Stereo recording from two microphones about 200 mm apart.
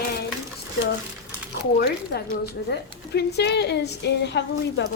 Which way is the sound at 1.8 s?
55° left (ahead or behind).